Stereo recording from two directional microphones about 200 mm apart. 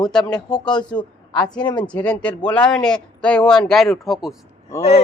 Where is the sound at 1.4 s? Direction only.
20° left (ahead or behind).